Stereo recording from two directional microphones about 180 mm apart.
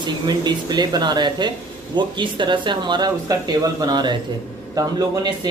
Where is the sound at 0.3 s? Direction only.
25° right (ahead or behind).